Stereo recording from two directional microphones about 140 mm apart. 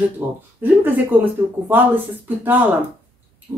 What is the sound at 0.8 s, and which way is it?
Speech, 15° right (ahead or behind).